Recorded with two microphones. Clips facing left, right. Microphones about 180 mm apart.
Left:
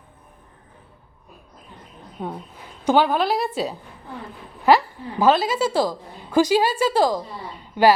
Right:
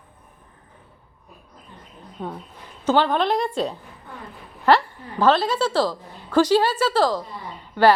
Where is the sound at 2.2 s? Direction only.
10° left (ahead or behind).